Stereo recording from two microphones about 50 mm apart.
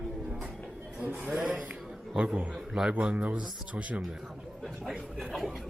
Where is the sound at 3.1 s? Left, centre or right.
Right.